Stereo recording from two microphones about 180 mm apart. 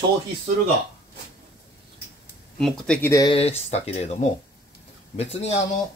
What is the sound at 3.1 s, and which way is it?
Speech, 20° left (ahead or behind).